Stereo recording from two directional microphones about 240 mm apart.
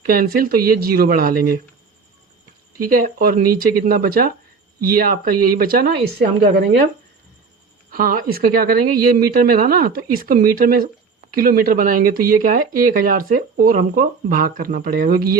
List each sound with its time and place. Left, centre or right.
0.0 s speech: right
2.8 s speech: right
7.9 s speech: right